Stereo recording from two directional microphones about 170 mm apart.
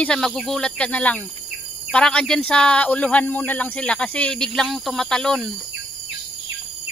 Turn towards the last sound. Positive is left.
turn(degrees=5)  # may be behind; listen again after turning